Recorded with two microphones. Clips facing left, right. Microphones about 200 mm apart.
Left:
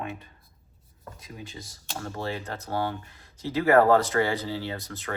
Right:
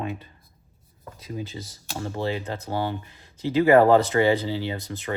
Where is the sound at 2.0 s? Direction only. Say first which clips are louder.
Right 5 dB; 20° right (ahead or behind).